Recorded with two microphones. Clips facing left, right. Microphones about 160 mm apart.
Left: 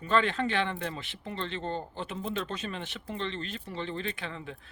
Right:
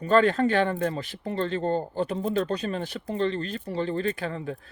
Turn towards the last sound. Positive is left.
turn(degrees=-40)  # may be behind; listen again after turning